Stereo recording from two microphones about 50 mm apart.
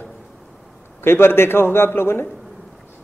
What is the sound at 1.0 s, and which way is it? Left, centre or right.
A man's voice, left.